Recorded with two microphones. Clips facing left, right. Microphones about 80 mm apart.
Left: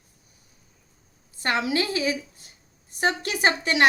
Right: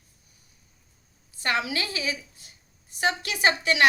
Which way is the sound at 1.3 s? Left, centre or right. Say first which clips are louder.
Left 3 dB; left.